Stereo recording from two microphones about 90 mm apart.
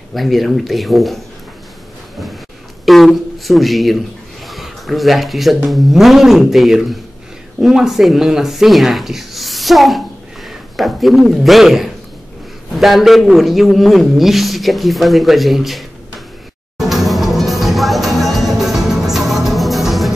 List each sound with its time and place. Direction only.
0.1 s a man's voice: centre (ahead or behind)
2.8 s a man's voice: centre (ahead or behind)
16.7 s music: centre (ahead or behind)